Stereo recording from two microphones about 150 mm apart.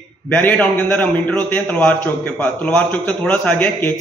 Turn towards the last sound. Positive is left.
turn(degrees=10)  # may be behind; listen again after turning